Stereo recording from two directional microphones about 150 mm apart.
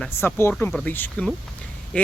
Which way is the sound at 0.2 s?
15° left (ahead or behind).